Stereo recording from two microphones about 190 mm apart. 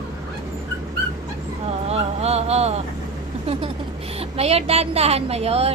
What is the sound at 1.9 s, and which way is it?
Speech, 35° right (ahead or behind).